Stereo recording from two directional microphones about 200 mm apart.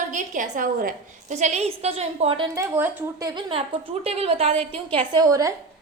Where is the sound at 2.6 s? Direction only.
10° right (ahead or behind).